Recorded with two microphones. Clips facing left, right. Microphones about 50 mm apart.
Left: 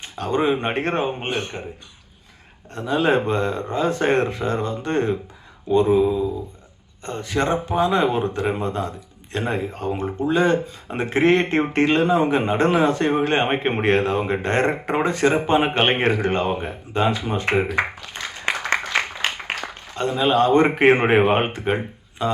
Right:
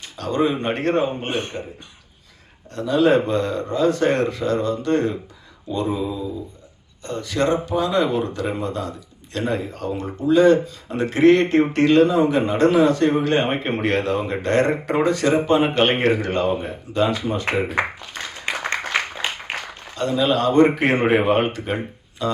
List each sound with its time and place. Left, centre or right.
0.0 s speech: left
2.7 s speech: left
20.0 s speech: left